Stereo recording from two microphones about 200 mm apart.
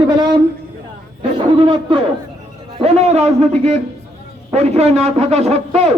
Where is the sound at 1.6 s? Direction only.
25° right (ahead or behind).